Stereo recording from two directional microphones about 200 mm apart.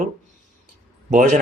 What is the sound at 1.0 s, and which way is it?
Speech, 40° right (ahead or behind).